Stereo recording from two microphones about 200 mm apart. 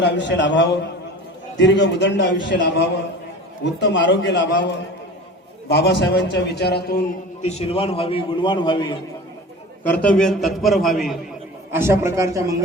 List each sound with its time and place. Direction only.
0.0 s a man's voice: 60° left (ahead or behind)
5.6 s a man's voice: 55° left (ahead or behind)
7.4 s a man's voice: 30° left (ahead or behind)
9.8 s a man's voice: 5° left (ahead or behind)
11.7 s speech: 10° right (ahead or behind)